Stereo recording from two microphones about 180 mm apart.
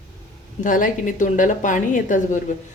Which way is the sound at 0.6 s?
45° left (ahead or behind).